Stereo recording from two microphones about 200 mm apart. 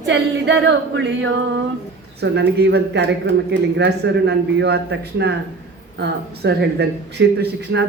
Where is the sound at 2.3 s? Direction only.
55° right (ahead or behind).